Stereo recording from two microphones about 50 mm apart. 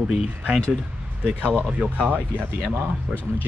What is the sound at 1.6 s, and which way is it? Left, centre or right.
Speech, right.